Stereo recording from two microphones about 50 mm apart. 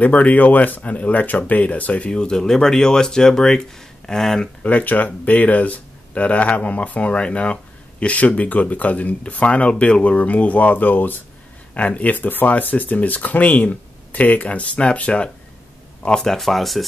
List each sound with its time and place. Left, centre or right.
0.0 s speech: left; by 4.5 s centre
4.6 s speech: left
11.7 s speech: left
16.1 s speech: centre